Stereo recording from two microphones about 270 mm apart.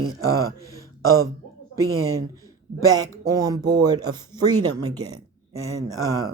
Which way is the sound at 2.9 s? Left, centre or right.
Centre.